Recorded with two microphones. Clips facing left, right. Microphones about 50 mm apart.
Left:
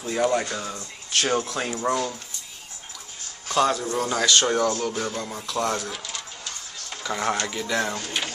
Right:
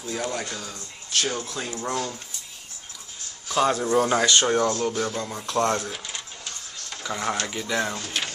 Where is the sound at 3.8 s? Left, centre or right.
Right.